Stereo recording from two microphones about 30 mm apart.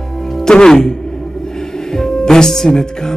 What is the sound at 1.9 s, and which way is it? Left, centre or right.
Music, centre.